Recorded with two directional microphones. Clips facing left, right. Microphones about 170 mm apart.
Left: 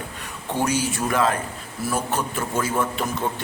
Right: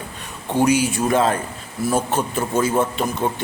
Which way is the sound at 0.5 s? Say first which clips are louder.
Right 6 dB; 15° right (ahead or behind).